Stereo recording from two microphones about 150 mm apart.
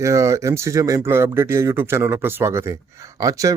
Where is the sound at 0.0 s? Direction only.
20° right (ahead or behind).